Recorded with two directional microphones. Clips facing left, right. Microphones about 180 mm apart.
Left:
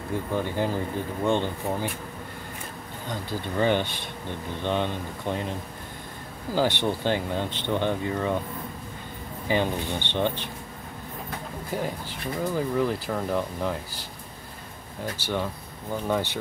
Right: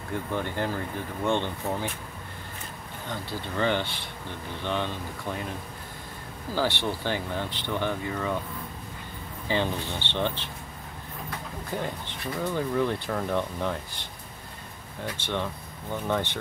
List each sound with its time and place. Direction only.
0.4 s speech: 15° left (ahead or behind)
3.1 s speech: 15° left (ahead or behind)
6.5 s speech: 15° left (ahead or behind)
9.5 s speech: 15° left (ahead or behind)
11.7 s speech: 5° left (ahead or behind)
15.1 s speech: 5° left (ahead or behind)